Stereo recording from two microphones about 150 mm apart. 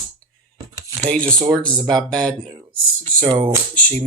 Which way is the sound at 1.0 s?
5° left (ahead or behind).